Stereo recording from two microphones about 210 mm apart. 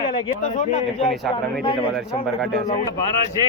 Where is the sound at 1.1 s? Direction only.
Centre (ahead or behind).